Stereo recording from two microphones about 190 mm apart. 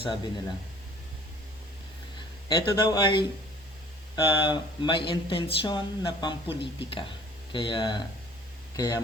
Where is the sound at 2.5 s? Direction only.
25° left (ahead or behind).